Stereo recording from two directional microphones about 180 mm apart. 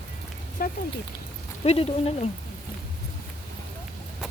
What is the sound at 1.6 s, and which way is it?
Speech, 35° left (ahead or behind).